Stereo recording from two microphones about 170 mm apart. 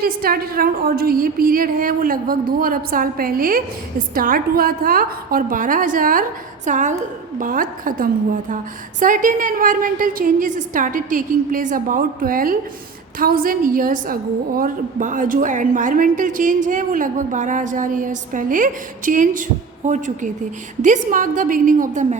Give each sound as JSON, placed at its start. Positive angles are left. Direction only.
{"t": 0.0, "sound": "a woman's voice", "side_deg": -60}